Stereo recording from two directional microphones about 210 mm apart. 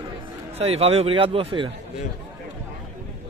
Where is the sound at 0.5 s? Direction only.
30° right (ahead or behind).